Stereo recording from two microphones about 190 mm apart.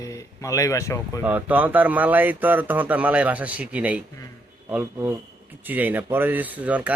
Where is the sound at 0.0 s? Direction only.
15° left (ahead or behind).